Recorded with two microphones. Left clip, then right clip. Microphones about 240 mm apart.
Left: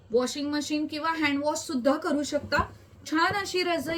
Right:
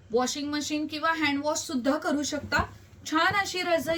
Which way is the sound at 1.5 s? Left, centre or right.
Right.